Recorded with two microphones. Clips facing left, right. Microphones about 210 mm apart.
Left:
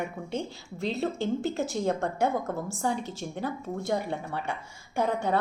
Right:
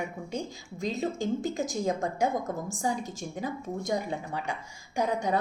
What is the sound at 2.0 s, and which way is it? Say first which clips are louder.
Speech: left 1 dB; 65° left (ahead or behind).